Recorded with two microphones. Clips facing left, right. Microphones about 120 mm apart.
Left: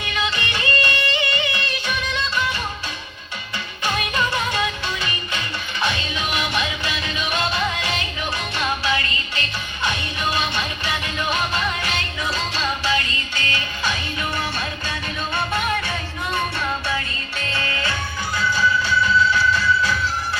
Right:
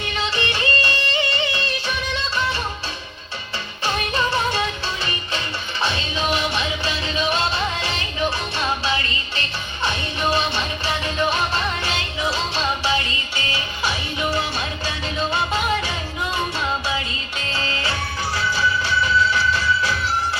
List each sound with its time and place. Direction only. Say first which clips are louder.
0.1 s music: even; 30° right (ahead or behind)
3.8 s music: right 1 dB; 30° right (ahead or behind)
5.8 s music: right 1 dB; 25° right (ahead or behind)
15.3 s music: even; 55° left (ahead or behind)
17.6 s music: right 1 dB; 25° right (ahead or behind)